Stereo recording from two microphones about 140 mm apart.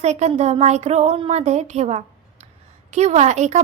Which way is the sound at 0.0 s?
55° right (ahead or behind).